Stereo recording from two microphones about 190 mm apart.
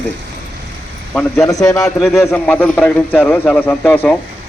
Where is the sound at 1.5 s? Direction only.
20° left (ahead or behind).